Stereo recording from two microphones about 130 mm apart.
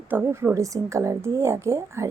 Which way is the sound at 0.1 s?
15° right (ahead or behind).